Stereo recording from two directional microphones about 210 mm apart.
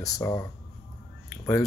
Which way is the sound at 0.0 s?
15° left (ahead or behind).